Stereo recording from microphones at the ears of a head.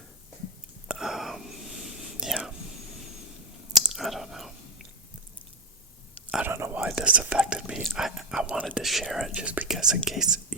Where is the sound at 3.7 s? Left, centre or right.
Centre.